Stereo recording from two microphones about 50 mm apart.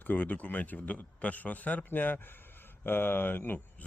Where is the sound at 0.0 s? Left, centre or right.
Left.